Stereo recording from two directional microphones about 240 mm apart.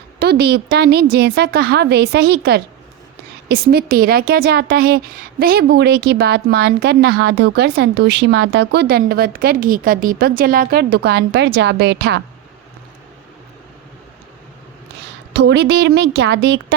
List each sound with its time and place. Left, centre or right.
0.2 s a woman's voice: right
15.3 s a woman's voice: right